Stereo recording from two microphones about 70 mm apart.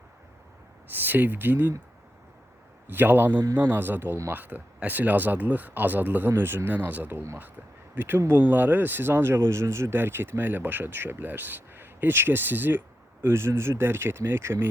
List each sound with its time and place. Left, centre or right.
0.9 s speech: right
2.8 s speech: right